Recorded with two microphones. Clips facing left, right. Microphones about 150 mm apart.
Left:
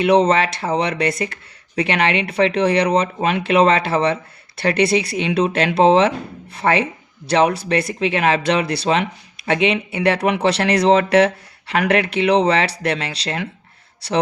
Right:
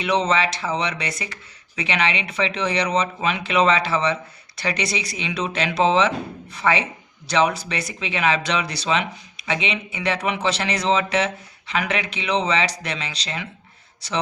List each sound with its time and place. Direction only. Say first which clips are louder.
0.0 s speech: left 6 dB; 55° left (ahead or behind)
7.9 s speech: left 1 dB; 45° left (ahead or behind)